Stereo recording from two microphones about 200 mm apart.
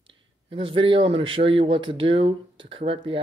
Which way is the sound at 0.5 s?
25° right (ahead or behind).